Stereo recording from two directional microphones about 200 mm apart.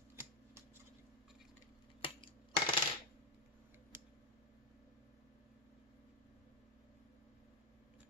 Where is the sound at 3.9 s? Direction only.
10° right (ahead or behind).